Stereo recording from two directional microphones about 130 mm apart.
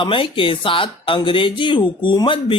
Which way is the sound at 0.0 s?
40° left (ahead or behind).